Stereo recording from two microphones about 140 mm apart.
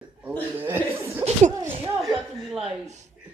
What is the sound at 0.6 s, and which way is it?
Chuckle, 15° right (ahead or behind).